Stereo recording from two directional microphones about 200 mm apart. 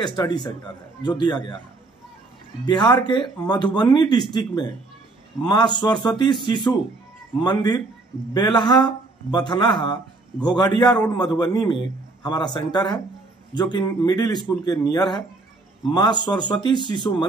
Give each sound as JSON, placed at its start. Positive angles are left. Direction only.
{"t": 0.0, "sound": "a man's voice", "side_deg": 20}
{"t": 2.6, "sound": "a man's voice", "side_deg": 20}